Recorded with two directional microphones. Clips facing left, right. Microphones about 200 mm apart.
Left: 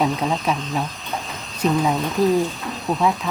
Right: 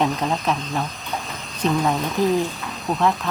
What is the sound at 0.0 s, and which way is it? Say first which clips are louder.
Speech: left 1 dB; 5° left (ahead or behind).